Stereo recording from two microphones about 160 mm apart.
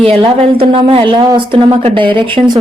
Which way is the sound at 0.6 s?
35° right (ahead or behind).